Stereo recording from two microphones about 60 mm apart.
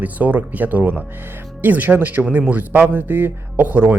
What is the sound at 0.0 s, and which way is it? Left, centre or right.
Speech, right.